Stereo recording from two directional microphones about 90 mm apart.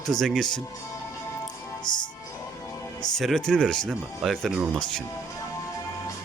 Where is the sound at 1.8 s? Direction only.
55° left (ahead or behind).